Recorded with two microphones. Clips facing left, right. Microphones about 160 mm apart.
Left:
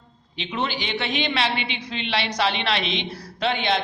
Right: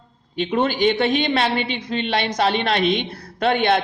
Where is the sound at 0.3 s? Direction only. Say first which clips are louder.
Right 8 dB; 50° right (ahead or behind).